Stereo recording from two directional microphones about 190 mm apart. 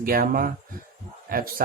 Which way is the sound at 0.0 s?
50° right (ahead or behind).